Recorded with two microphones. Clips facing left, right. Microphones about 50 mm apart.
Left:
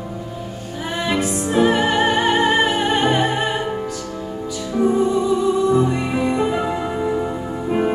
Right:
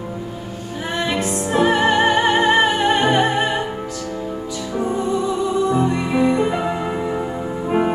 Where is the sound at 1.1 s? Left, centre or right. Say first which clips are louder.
Left 3 dB; centre.